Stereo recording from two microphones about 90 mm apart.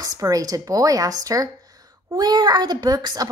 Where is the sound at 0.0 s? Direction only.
40° right (ahead or behind).